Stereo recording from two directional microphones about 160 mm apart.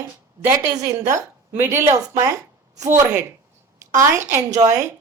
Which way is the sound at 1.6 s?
15° right (ahead or behind).